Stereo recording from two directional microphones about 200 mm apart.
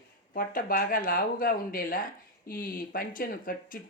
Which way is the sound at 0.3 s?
45° left (ahead or behind).